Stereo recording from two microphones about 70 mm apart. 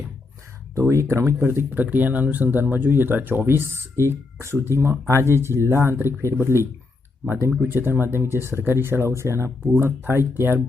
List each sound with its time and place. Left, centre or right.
0.8 s speech: right
7.7 s speech: right